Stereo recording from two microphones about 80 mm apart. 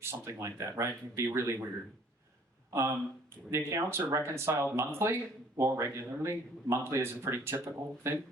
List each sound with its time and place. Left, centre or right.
0.0 s speech: right
3.5 s speech: right
7.5 s speech: right